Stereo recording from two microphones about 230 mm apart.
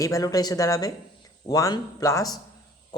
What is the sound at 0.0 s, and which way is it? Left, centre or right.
Speech, centre.